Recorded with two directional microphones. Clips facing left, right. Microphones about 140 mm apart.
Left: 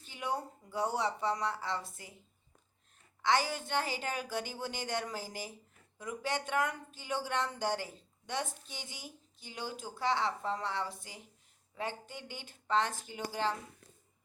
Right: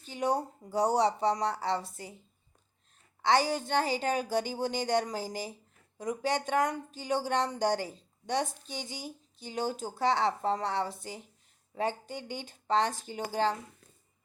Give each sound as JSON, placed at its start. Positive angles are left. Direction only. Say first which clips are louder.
{"t": 0.0, "sound": "speech", "louder": "right 7 dB", "side_deg": -35}
{"t": 3.2, "sound": "speech", "louder": "right 4 dB", "side_deg": -35}